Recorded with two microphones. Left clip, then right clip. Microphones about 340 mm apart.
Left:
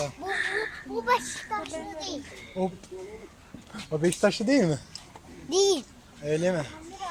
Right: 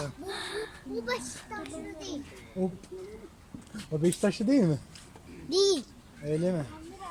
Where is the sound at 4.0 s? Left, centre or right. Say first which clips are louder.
Left 4 dB; left.